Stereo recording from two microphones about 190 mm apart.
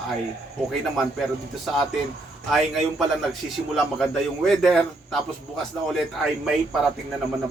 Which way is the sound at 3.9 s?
Centre (ahead or behind).